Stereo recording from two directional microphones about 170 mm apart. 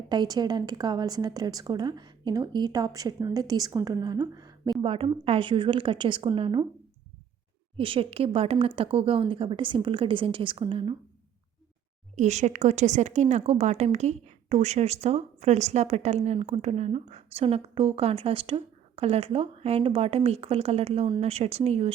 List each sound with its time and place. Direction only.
0.1 s a woman's voice: 25° right (ahead or behind)
7.8 s a woman's voice: 30° right (ahead or behind)
12.1 s a woman's voice: 45° right (ahead or behind)